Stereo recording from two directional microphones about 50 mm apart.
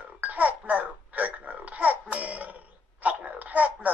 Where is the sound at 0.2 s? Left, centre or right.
Right.